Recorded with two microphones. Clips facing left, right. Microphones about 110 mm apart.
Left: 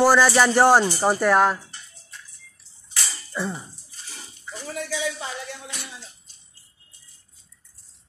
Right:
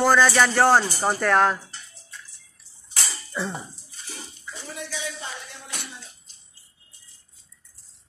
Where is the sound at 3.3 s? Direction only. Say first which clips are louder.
Left 1 dB; centre (ahead or behind).